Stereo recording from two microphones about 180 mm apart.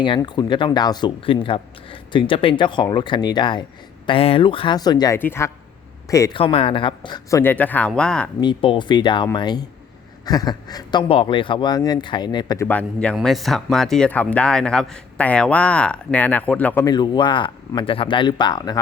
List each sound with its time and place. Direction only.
0.0 s speech: 25° left (ahead or behind)
6.3 s speech: 30° left (ahead or behind); by 8.3 s 5° left (ahead or behind)
8.4 s speech: 25° left (ahead or behind)
12.6 s speech: 5° left (ahead or behind)
16.8 s speech: 25° left (ahead or behind)